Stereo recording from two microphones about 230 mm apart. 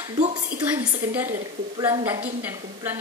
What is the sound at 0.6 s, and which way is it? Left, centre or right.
A woman's voice, centre.